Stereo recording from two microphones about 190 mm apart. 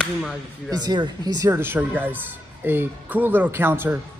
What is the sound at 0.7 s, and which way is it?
Speech, 20° right (ahead or behind).